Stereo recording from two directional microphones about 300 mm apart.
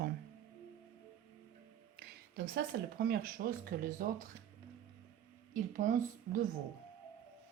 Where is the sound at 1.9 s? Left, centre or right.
Right.